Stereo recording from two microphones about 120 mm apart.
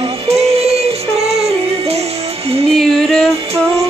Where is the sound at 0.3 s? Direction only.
60° right (ahead or behind).